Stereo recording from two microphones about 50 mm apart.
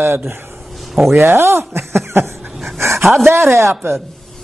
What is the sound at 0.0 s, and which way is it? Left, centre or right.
A woman's voice, right.